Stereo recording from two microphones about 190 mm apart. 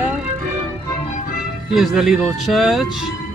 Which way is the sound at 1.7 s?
Centre (ahead or behind).